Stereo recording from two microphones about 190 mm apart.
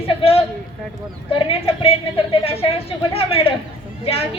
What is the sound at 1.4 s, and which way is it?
A woman's voice, 30° left (ahead or behind).